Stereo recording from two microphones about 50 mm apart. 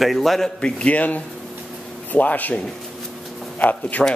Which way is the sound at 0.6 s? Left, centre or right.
Left.